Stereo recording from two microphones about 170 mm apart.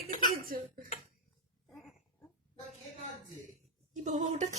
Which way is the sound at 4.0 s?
45° right (ahead or behind).